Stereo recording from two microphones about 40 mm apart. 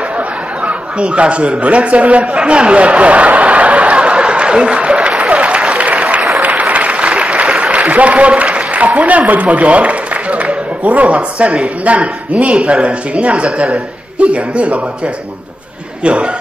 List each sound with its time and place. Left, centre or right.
0.7 s a sound: right
5.8 s applause: right
8.8 s speech: right
16.0 s speech: right